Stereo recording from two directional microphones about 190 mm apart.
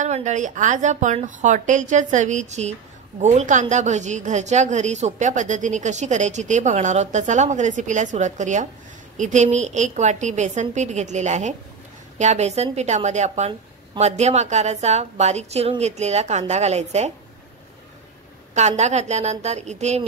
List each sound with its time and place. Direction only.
0.0 s a woman's voice: 40° right (ahead or behind)
18.5 s a woman's voice: 35° right (ahead or behind)